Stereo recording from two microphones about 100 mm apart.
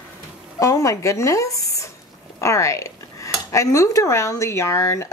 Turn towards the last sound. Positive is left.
turn(degrees=30)  # may be behind; listen again after turning